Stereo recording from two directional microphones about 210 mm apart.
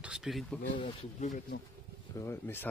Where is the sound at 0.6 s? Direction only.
35° left (ahead or behind).